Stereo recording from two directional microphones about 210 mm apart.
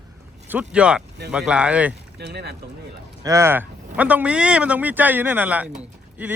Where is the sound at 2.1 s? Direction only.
50° right (ahead or behind).